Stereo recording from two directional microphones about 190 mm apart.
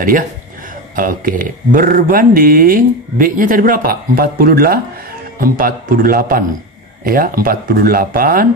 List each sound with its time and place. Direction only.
0.9 s speech: 45° right (ahead or behind)